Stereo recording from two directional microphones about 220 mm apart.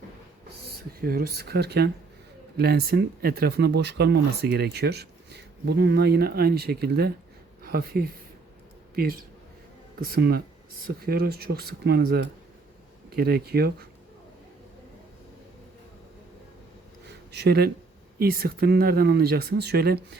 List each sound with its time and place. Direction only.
1.0 s speech: 45° right (ahead or behind)
17.3 s speech: 50° right (ahead or behind)